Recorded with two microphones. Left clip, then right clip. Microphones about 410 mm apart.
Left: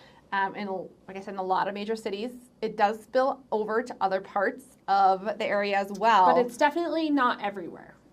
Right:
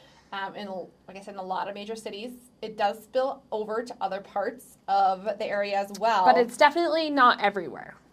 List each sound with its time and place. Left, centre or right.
0.3 s a woman's voice: left
6.2 s a woman's voice: right